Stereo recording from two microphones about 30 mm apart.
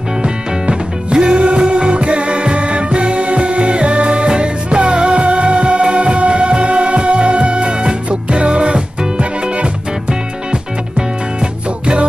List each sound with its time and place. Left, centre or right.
0.2 s music: right
11.8 s music: right